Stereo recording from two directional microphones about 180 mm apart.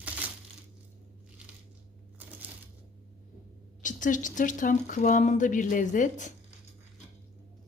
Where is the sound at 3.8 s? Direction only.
45° left (ahead or behind).